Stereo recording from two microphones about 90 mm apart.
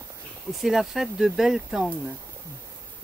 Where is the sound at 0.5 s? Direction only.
Centre (ahead or behind).